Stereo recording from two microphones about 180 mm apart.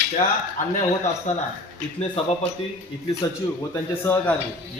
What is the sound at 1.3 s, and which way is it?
Speech, 40° left (ahead or behind).